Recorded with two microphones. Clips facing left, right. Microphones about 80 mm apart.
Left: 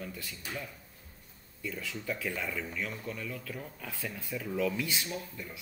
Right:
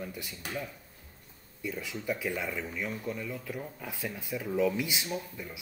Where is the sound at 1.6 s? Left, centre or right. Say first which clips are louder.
Right 2 dB; centre.